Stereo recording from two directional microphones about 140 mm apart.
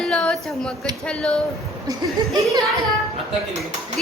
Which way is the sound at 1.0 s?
5° left (ahead or behind).